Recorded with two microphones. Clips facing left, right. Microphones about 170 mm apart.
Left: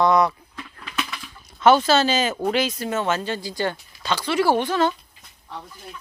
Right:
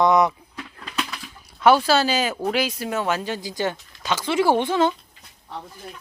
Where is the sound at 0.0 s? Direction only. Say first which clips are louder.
Right 1 dB; 20° right (ahead or behind).